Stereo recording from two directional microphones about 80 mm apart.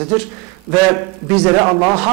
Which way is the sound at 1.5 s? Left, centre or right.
Centre.